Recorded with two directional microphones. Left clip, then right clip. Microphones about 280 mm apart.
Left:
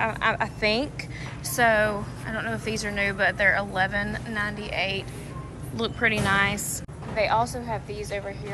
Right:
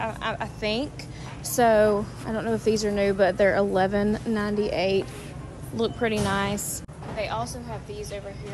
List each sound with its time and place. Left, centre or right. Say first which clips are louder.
0.0 s speech: left 5 dB; centre